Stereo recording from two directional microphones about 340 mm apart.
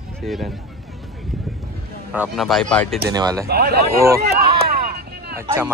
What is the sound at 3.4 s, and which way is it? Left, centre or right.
Speech, right.